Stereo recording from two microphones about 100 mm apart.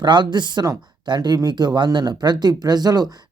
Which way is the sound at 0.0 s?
50° right (ahead or behind).